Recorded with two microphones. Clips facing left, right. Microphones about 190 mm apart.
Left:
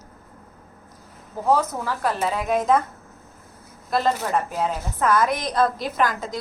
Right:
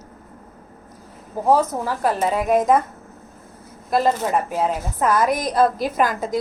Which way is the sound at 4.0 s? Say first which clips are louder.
Right 3 dB; 10° right (ahead or behind).